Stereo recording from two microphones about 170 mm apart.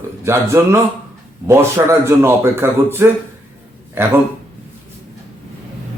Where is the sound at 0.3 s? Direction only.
15° right (ahead or behind).